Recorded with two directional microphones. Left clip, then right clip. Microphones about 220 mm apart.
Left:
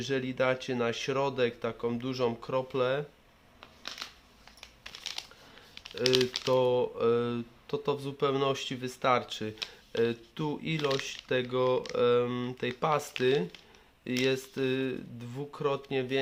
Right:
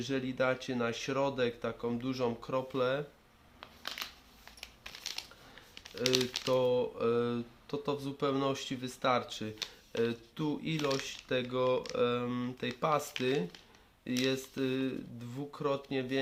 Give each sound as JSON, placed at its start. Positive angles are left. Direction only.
{"t": 0.0, "sound": "speech", "side_deg": 25}
{"t": 4.9, "sound": "computer keyboard", "side_deg": 10}
{"t": 6.0, "sound": "speech", "side_deg": 10}
{"t": 6.4, "sound": "speech", "side_deg": 25}
{"t": 10.8, "sound": "speech", "side_deg": 0}
{"t": 11.3, "sound": "speech", "side_deg": 25}